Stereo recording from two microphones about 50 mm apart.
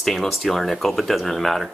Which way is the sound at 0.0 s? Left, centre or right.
Centre.